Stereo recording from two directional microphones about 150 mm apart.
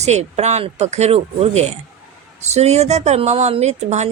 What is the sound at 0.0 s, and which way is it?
Speech, 45° right (ahead or behind).